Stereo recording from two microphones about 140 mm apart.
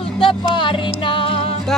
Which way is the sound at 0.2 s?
35° left (ahead or behind).